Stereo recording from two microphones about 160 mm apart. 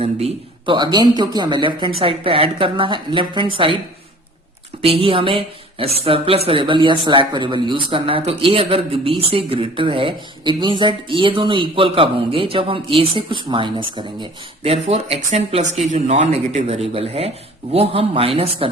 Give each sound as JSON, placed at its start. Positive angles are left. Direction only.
{"t": 0.0, "sound": "speech", "side_deg": -40}
{"t": 4.8, "sound": "speech", "side_deg": -35}